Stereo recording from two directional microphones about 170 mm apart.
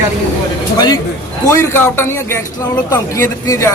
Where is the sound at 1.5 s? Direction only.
15° left (ahead or behind).